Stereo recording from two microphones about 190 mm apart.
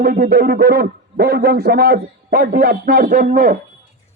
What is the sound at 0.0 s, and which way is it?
A man's voice, 55° right (ahead or behind).